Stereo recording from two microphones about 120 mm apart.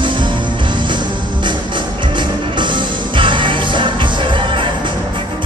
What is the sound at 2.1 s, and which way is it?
Music, 40° right (ahead or behind).